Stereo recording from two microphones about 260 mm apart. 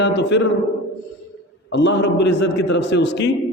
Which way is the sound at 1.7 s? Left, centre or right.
Left.